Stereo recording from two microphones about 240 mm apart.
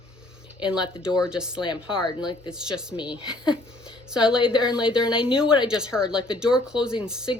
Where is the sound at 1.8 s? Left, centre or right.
Centre.